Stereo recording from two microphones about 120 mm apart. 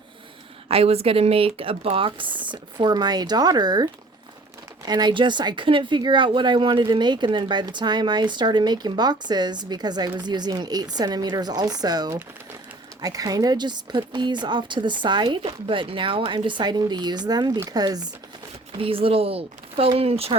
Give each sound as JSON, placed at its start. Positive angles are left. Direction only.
{"t": 0.7, "sound": "speech", "side_deg": -55}
{"t": 4.9, "sound": "speech", "side_deg": -35}
{"t": 18.8, "sound": "speech", "side_deg": -50}